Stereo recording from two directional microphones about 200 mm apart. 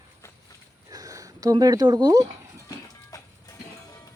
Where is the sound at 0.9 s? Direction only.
15° right (ahead or behind).